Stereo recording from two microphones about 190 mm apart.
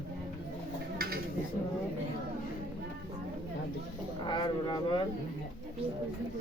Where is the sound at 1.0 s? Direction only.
50° right (ahead or behind).